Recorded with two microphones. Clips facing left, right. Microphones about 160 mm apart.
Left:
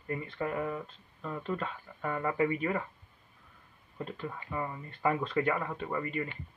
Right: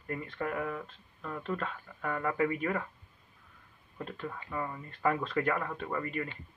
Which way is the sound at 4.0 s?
5° left (ahead or behind).